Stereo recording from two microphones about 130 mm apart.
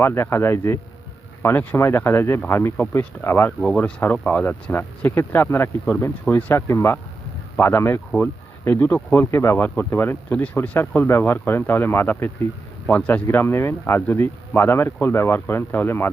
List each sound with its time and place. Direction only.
0.0 s speech: 20° left (ahead or behind)